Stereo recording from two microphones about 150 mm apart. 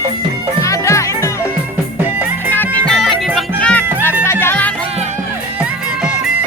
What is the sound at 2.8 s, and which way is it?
Music, centre (ahead or behind).